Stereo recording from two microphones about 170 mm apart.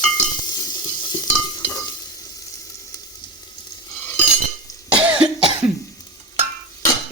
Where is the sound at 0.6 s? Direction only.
25° left (ahead or behind).